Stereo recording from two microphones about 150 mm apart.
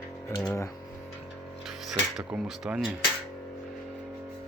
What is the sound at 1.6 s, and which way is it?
Speech, 5° right (ahead or behind).